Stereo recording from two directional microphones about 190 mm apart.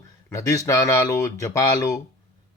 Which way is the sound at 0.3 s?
15° left (ahead or behind).